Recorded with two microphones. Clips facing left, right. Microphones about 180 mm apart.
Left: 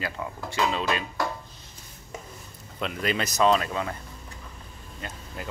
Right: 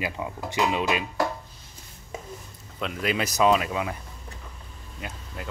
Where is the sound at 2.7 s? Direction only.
Centre (ahead or behind).